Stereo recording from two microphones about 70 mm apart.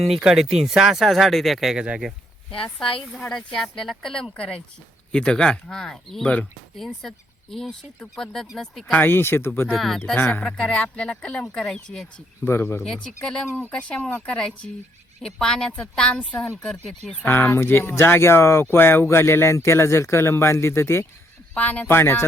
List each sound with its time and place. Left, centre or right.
0.0 s speech: centre
1.7 s speech: centre
3.2 s a woman's voice: centre
6.2 s a woman's voice: centre
6.7 s a woman's voice: centre
8.9 s speech: left
9.7 s a woman's voice: centre
12.5 s speech: left
12.8 s a woman's voice: centre
13.5 s a woman's voice: left; by 17.2 s centre
17.2 s speech: left
21.5 s speech: centre
21.8 s speech: left